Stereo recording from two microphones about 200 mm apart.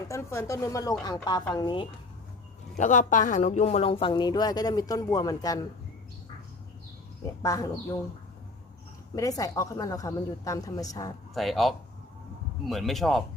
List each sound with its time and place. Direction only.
0.1 s a woman's voice: 15° left (ahead or behind)
2.7 s speech: 40° left (ahead or behind); by 5.5 s 20° left (ahead or behind)
7.4 s a woman's voice: 15° left (ahead or behind)
9.1 s a woman's voice: 15° left (ahead or behind)
11.3 s speech: centre (ahead or behind)